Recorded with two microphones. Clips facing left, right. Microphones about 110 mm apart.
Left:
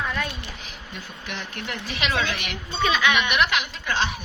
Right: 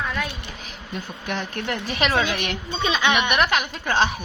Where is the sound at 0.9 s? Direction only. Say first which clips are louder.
Right 7 dB; 45° right (ahead or behind).